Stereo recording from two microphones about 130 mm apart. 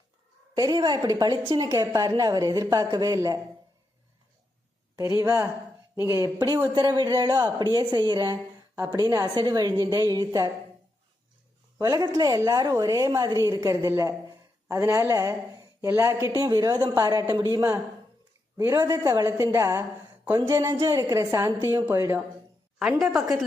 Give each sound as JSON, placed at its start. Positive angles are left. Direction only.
{"t": 0.5, "sound": "a woman's voice", "side_deg": -30}
{"t": 4.9, "sound": "a woman's voice", "side_deg": -25}
{"t": 6.7, "sound": "a sound", "side_deg": -35}
{"t": 8.9, "sound": "a woman's voice", "side_deg": -30}
{"t": 11.8, "sound": "a woman's voice", "side_deg": -30}
{"t": 22.8, "sound": "a woman's voice", "side_deg": -5}